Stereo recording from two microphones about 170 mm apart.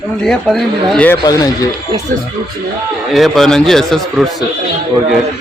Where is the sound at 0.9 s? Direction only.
10° left (ahead or behind).